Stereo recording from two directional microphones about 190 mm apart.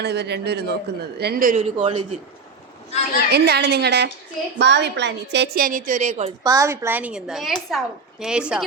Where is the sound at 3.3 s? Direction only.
60° right (ahead or behind); by 6.3 s 35° right (ahead or behind).